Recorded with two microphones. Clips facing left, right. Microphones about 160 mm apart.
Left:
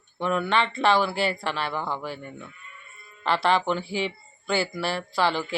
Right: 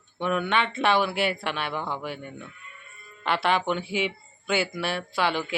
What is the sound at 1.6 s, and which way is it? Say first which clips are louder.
Speech: left 1 dB; 15° right (ahead or behind).